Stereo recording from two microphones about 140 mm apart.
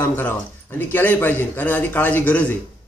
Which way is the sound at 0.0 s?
15° left (ahead or behind).